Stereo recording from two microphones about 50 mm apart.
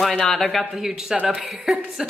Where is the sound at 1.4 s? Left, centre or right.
Centre.